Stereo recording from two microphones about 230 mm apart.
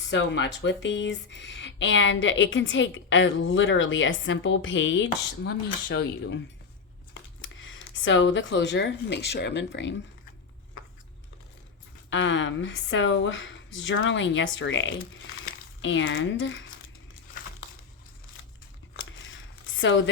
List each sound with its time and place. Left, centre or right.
0.1 s speech: left
12.1 s speech: left
18.9 s a sound: left